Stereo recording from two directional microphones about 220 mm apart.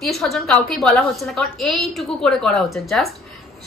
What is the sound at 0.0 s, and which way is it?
A woman's voice, centre (ahead or behind).